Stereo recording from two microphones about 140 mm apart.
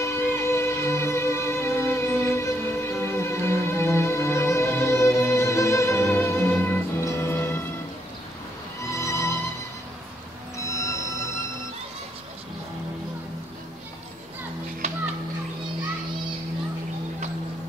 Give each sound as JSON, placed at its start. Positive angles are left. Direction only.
{"t": 0.0, "sound": "music", "side_deg": 20}
{"t": 8.9, "sound": "music", "side_deg": 20}
{"t": 10.7, "sound": "music", "side_deg": 20}
{"t": 14.8, "sound": "children playing", "side_deg": -55}